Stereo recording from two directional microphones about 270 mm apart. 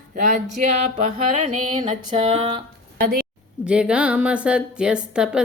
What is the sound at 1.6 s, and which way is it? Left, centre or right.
Music, right.